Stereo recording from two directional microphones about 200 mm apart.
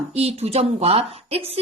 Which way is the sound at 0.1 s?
30° right (ahead or behind).